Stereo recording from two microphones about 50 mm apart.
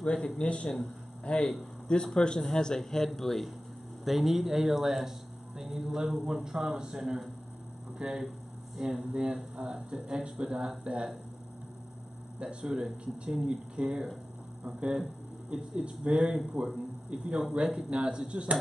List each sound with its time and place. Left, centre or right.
0.0 s a man's voice: left; by 9.0 s centre
9.1 s a man's voice: centre
12.4 s speech: right
15.5 s speech: right
17.8 s speech: centre